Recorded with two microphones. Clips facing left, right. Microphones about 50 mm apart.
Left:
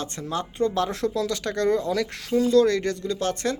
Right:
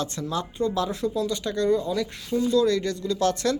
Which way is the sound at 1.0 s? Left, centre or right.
Left.